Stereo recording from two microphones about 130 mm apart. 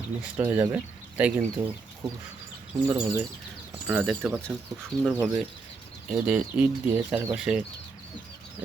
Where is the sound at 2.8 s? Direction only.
15° right (ahead or behind).